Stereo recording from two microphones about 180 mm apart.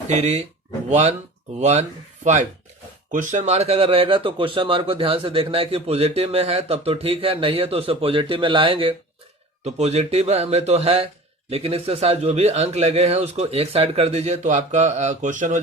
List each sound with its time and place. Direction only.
0.1 s speech: 40° right (ahead or behind)